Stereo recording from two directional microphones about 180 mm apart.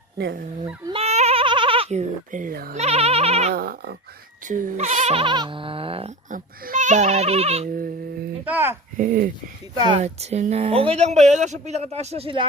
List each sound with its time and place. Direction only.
0.9 s goat: 35° right (ahead or behind); by 2.7 s 55° right (ahead or behind)
2.7 s speech: 35° right (ahead or behind)
3.5 s sheep: 55° right (ahead or behind)
4.4 s speech: 50° right (ahead or behind); by 6.1 s 30° right (ahead or behind)
6.3 s speech: 45° right (ahead or behind)
8.4 s a child's voice: 10° right (ahead or behind)
9.0 s speech: 50° right (ahead or behind)
9.7 s speech: 25° right (ahead or behind)
10.0 s speech: 35° right (ahead or behind)